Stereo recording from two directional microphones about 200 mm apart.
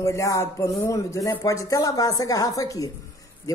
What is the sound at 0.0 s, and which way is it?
A woman's voice, 15° left (ahead or behind).